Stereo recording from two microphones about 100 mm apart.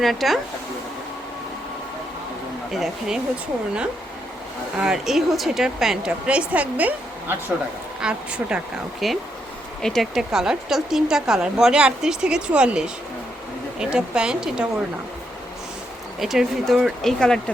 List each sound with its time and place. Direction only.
0.0 s speech: centre (ahead or behind)
2.7 s speech: centre (ahead or behind)
4.8 s a woman's voice: 5° right (ahead or behind)
16.2 s speech: 5° right (ahead or behind)